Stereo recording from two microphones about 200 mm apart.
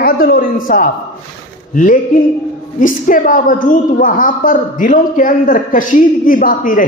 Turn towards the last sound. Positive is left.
turn(degrees=45)  # may be behind; listen again after turning